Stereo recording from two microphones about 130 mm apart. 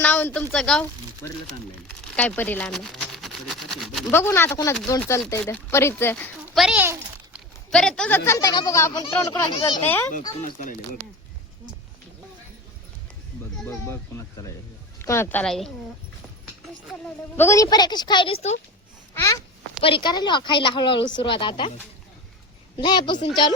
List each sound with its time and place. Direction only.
0.0 s a sound: 15° left (ahead or behind)
0.5 s speech: 5° left (ahead or behind)
2.1 s speech: 10° left (ahead or behind)
4.1 s speech: 20° left (ahead or behind)
6.5 s a child's voice: centre (ahead or behind)
8.2 s speech: 25° left (ahead or behind)
9.8 s speech: 15° left (ahead or behind)
13.7 s speech: 20° left (ahead or behind)
17.3 s a woman's voice: 20° left (ahead or behind); by 18.3 s 40° left (ahead or behind)
19.1 s babbling: 25° left (ahead or behind)
19.8 s a woman's voice: 40° left (ahead or behind)
22.8 s a woman's voice: 35° left (ahead or behind)